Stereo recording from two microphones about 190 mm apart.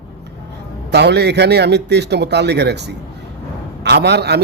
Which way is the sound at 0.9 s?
60° right (ahead or behind).